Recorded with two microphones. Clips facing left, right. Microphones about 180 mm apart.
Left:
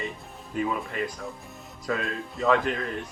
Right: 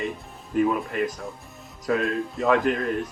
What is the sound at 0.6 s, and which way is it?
Speech, 45° right (ahead or behind).